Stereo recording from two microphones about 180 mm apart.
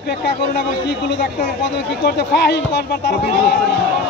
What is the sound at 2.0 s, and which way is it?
Speech, 70° left (ahead or behind).